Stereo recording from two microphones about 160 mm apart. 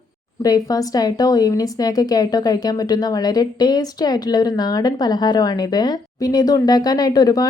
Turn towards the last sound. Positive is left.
turn(degrees=25)  # may be behind; listen again after turning